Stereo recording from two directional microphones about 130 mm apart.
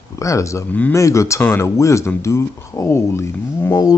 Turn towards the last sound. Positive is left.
turn(degrees=25)  # may be behind; listen again after turning